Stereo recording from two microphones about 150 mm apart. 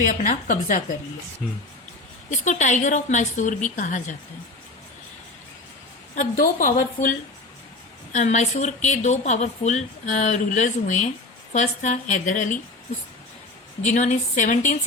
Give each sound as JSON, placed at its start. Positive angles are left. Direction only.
{"t": 0.0, "sound": "a woman's voice", "side_deg": 60}
{"t": 2.3, "sound": "a woman's voice", "side_deg": 50}
{"t": 6.1, "sound": "a woman's voice", "side_deg": 65}
{"t": 8.1, "sound": "a woman's voice", "side_deg": 55}
{"t": 13.8, "sound": "a woman's voice", "side_deg": 50}